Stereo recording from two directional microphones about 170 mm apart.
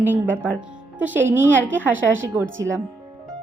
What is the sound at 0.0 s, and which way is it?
Speech, 10° right (ahead or behind).